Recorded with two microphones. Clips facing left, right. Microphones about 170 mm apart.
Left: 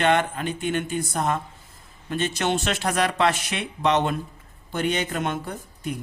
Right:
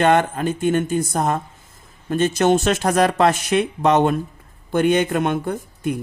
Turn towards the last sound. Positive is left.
turn(degrees=-55)  # may be behind; listen again after turning